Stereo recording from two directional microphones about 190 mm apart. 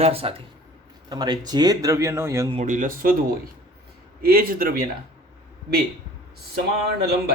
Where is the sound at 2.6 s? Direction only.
45° right (ahead or behind).